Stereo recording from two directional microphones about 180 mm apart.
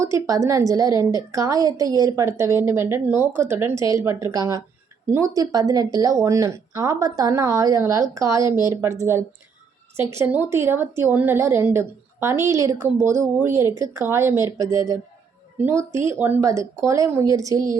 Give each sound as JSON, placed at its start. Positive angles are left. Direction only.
{"t": 0.0, "sound": "a woman's voice", "side_deg": -15}